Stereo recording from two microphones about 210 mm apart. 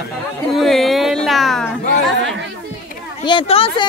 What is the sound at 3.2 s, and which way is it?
Speech, 25° left (ahead or behind).